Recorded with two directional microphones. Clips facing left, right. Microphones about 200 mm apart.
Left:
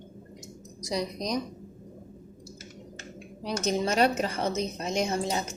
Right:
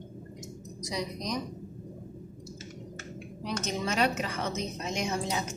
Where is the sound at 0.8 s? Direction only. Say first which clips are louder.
Left 4 dB; 35° left (ahead or behind).